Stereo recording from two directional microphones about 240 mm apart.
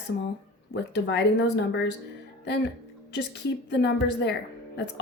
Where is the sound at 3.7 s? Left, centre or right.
Left.